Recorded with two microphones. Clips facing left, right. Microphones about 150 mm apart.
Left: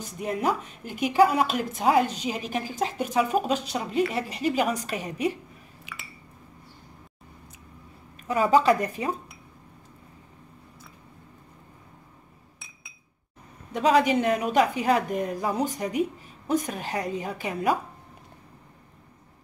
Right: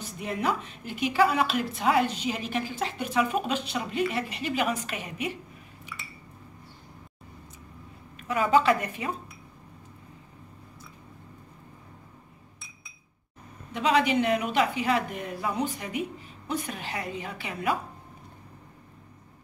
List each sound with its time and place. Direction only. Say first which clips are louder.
0.4 s a woman's voice: left 1 dB; 40° left (ahead or behind)
8.2 s a woman's voice: left 2 dB; 35° left (ahead or behind)
13.7 s a woman's voice: left 3 dB; 40° left (ahead or behind)